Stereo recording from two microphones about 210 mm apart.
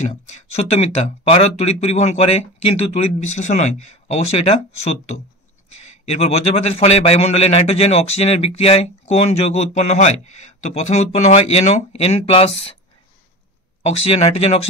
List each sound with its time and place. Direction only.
0.0 s a man's voice: 30° left (ahead or behind)
13.8 s a man's voice: 30° left (ahead or behind)